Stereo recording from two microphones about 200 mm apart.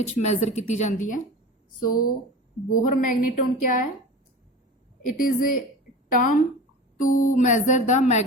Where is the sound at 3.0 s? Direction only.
45° left (ahead or behind).